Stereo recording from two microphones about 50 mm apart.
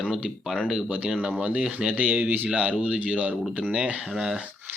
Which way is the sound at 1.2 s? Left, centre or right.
Right.